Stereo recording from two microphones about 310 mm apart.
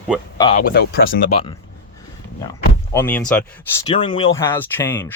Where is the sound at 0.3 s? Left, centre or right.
Centre.